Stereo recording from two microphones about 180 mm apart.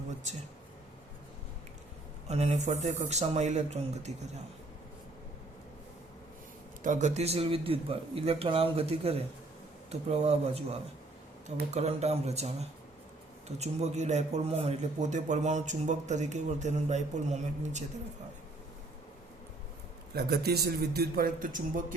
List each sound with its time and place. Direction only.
2.2 s a man's voice: 35° right (ahead or behind)
6.8 s a man's voice: 45° right (ahead or behind)
20.1 s a man's voice: 65° right (ahead or behind)